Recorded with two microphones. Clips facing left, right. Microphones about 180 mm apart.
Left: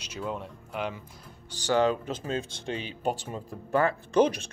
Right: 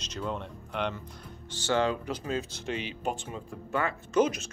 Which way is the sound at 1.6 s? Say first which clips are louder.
Left 3 dB; 20° left (ahead or behind).